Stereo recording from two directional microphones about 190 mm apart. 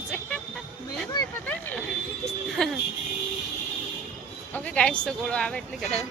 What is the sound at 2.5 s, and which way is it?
Vehicle, centre (ahead or behind).